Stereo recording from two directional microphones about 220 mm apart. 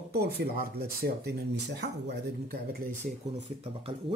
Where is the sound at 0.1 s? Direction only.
45° right (ahead or behind).